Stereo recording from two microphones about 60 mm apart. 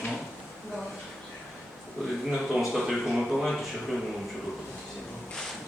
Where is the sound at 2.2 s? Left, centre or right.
Centre.